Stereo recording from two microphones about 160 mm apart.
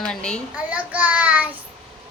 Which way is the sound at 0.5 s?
10° right (ahead or behind).